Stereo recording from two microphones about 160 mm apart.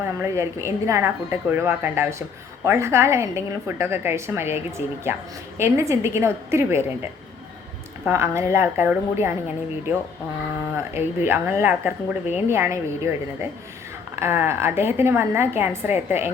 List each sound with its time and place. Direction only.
0.0 s speech: 15° right (ahead or behind)
8.0 s speech: 15° right (ahead or behind)
10.8 s speech: 15° right (ahead or behind)
14.2 s speech: 15° right (ahead or behind)